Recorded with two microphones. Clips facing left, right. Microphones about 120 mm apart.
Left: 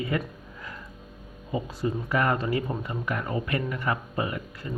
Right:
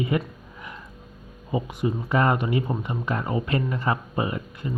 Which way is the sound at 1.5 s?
20° right (ahead or behind).